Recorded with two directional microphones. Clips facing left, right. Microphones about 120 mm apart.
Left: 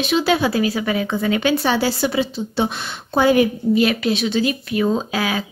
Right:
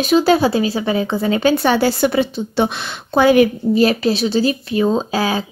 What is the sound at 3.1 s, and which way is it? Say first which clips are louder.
Speech: right 3 dB; 80° right.